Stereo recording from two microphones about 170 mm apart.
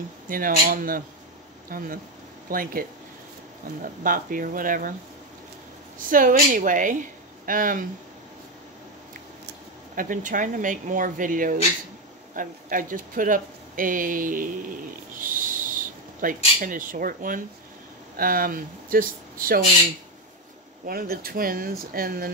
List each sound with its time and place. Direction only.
0.3 s speech: 55° right (ahead or behind)
3.8 s speech: 55° right (ahead or behind)
5.9 s speech: 55° right (ahead or behind)
9.9 s speech: 50° right (ahead or behind)
20.8 s speech: 60° right (ahead or behind)